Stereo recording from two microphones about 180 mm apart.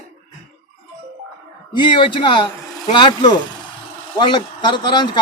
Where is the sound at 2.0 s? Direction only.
30° left (ahead or behind).